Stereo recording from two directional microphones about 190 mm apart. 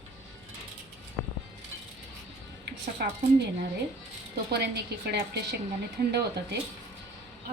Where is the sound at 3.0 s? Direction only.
55° right (ahead or behind).